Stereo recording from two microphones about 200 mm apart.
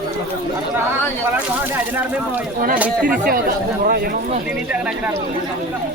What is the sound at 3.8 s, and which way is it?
Speech, 50° right (ahead or behind).